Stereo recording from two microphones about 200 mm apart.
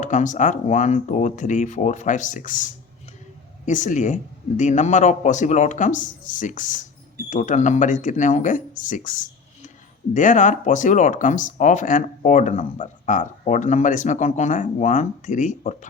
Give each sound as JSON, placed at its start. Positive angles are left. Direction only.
{"t": 0.0, "sound": "speech", "side_deg": 40}
{"t": 3.7, "sound": "speech", "side_deg": 40}